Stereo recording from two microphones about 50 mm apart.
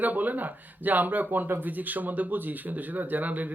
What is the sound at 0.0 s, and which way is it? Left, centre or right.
Speech, right.